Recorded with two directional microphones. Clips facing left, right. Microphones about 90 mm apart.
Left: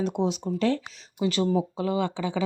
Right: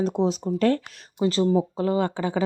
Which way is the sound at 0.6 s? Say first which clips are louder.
Right 4 dB; 50° right (ahead or behind).